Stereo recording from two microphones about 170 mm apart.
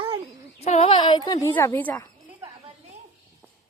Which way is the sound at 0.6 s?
40° left (ahead or behind).